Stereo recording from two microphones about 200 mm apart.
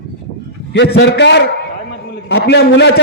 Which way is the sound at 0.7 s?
60° left (ahead or behind).